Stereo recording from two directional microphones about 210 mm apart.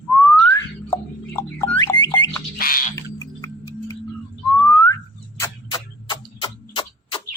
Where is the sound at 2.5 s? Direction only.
45° left (ahead or behind).